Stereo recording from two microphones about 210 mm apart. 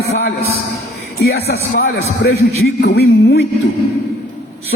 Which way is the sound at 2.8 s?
50° left (ahead or behind).